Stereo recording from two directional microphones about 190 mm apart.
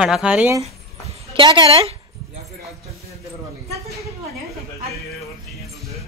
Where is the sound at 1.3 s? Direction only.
25° right (ahead or behind).